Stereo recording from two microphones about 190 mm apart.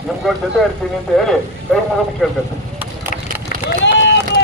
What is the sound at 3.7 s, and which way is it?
Run, 65° left (ahead or behind).